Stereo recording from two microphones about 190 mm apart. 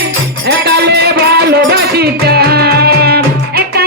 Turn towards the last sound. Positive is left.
turn(degrees=-55)  # may be behind; listen again after turning